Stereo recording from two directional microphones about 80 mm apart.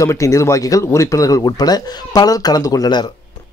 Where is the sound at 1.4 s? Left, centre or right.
Left.